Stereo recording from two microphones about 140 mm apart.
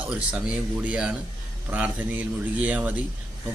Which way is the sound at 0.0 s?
10° right (ahead or behind).